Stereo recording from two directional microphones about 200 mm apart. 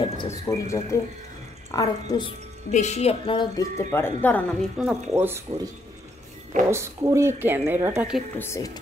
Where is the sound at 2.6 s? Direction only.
35° left (ahead or behind); by 4.4 s 10° left (ahead or behind).